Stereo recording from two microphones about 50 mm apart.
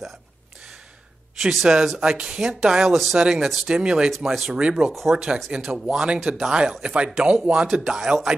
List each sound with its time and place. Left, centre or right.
1.5 s speech: centre
4.6 s speech: right
6.1 s speech: centre; by 7.6 s right
7.7 s speech: centre